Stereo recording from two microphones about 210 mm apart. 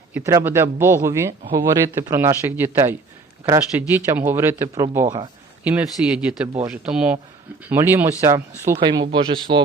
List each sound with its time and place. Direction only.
0.1 s speech: 10° right (ahead or behind)